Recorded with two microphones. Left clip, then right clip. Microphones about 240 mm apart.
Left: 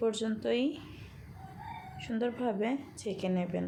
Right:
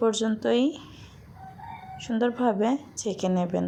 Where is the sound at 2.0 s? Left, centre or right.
Right.